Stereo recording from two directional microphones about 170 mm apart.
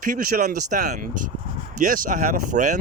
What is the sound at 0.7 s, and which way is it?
Speech, 45° right (ahead or behind).